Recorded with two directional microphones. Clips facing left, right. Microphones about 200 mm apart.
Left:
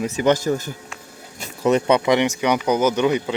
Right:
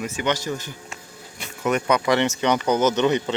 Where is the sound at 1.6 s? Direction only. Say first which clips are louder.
Left 4 dB; 30° left (ahead or behind).